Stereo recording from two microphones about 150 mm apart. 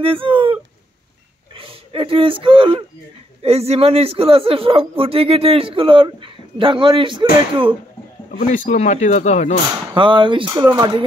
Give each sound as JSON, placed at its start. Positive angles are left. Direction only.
{"t": 0.0, "sound": "speech", "side_deg": -35}
{"t": 1.6, "sound": "speech", "side_deg": -35}
{"t": 8.3, "sound": "speech", "side_deg": 55}
{"t": 9.9, "sound": "speech", "side_deg": -35}